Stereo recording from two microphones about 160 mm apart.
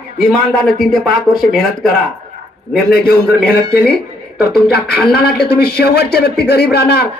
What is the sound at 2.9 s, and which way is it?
A man's voice, 75° left (ahead or behind).